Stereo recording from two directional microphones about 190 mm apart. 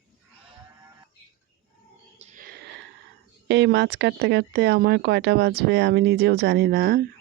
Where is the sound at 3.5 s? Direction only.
65° right (ahead or behind).